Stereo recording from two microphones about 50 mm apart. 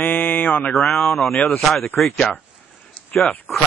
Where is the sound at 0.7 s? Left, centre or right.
Centre.